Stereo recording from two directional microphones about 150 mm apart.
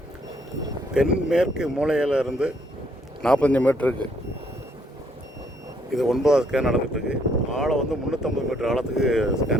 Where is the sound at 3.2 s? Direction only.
5° left (ahead or behind).